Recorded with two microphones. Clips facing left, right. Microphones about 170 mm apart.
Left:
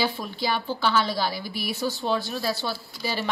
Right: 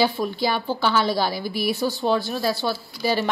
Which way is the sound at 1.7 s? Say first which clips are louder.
Right 3 dB; 60° right (ahead or behind).